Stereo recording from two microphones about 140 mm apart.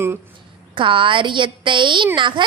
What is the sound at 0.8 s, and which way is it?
A woman's voice, 35° right (ahead or behind).